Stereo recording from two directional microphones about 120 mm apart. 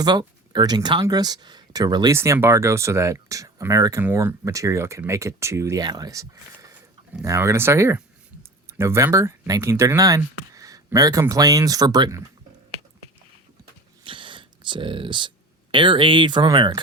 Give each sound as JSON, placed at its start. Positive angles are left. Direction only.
{"t": 0.0, "sound": "speech", "side_deg": -35}
{"t": 2.1, "sound": "speech", "side_deg": -20}
{"t": 5.8, "sound": "speech", "side_deg": -35}
{"t": 14.0, "sound": "a sound", "side_deg": -45}
{"t": 15.7, "sound": "speech", "side_deg": -45}